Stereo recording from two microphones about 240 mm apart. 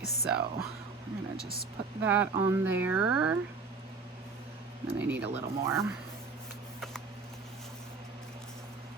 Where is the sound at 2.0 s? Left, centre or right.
Centre.